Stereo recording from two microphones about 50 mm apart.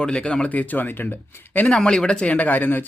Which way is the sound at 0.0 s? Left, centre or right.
Centre.